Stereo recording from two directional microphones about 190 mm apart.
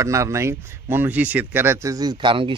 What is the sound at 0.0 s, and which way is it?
A man's voice, 15° right (ahead or behind).